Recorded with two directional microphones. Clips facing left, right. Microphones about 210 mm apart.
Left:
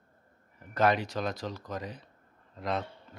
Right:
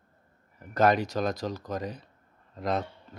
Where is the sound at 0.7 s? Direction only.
40° right (ahead or behind).